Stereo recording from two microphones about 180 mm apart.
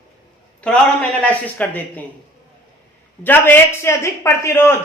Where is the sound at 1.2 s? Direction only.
10° left (ahead or behind).